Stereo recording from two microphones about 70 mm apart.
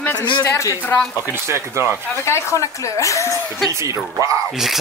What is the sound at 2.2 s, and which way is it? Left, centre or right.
Speech, left.